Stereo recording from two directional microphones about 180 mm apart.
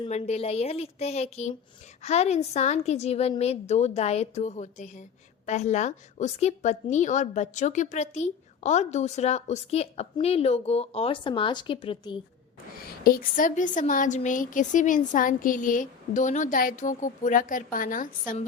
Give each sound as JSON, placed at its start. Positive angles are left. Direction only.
{"t": 0.0, "sound": "a woman's voice", "side_deg": 35}
{"t": 13.1, "sound": "a woman's voice", "side_deg": 50}